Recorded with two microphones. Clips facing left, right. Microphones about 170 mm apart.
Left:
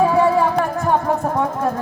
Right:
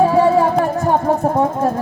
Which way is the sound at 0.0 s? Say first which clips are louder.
Right 3 dB; 35° right (ahead or behind).